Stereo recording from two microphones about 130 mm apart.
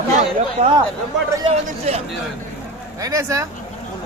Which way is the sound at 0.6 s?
50° right (ahead or behind).